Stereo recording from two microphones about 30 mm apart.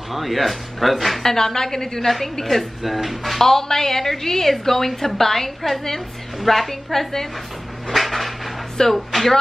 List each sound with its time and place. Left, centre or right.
0.1 s speech: centre
1.2 s a woman's voice: centre
2.8 s speech: centre
3.3 s a woman's voice: centre
7.9 s a sound: centre
8.9 s speech: centre